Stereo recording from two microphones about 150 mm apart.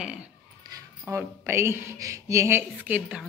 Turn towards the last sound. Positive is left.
turn(degrees=-10)  # may be behind; listen again after turning